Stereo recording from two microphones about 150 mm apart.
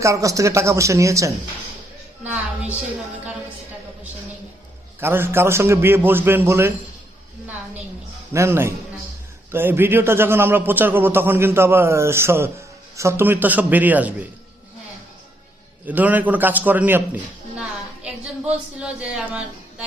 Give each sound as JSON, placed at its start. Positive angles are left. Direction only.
{"t": 0.0, "sound": "speech", "side_deg": -20}
{"t": 2.2, "sound": "a sound", "side_deg": -10}
{"t": 4.9, "sound": "a man's voice", "side_deg": -15}
{"t": 8.3, "sound": "a man's voice", "side_deg": -15}
{"t": 15.9, "sound": "a man's voice", "side_deg": -10}
{"t": 18.8, "sound": "a man's voice", "side_deg": -5}